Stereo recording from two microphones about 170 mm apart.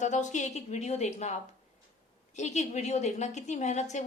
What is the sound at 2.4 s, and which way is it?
A woman's voice, 45° left (ahead or behind).